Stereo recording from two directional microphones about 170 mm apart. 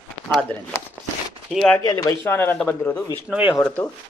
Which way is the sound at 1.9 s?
20° left (ahead or behind).